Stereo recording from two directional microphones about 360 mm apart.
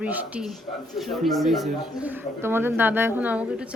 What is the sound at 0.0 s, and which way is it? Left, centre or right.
A woman's voice, centre.